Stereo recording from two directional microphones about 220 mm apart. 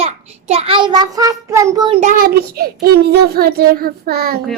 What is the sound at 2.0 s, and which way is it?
Child singing, 35° right (ahead or behind).